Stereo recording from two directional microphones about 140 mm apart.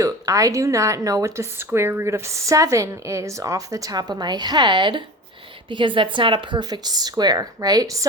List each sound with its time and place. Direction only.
0.0 s speech: 25° right (ahead or behind)